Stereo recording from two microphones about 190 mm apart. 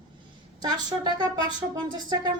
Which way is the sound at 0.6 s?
20° right (ahead or behind).